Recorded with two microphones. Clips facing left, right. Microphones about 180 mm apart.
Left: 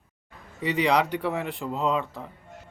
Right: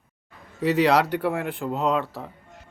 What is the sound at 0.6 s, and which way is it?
Speech, 90° right.